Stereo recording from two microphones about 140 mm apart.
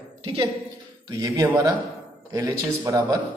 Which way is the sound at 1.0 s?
25° right (ahead or behind).